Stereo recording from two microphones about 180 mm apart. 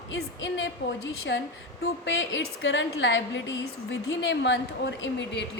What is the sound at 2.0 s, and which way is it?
A woman's voice, 90° left.